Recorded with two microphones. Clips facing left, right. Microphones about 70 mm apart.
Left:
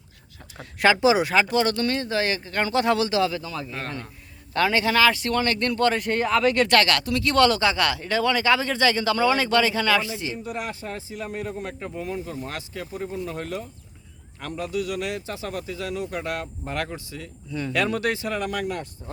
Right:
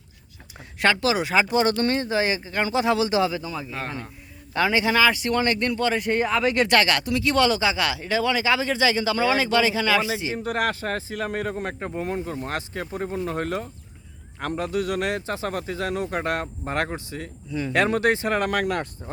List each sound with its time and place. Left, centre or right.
0.8 s speech: centre
1.4 s speech: right
2.5 s speech: centre
3.1 s speech: centre
10.3 s a man's voice: right
11.5 s a man's voice: right
18.3 s a man's voice: right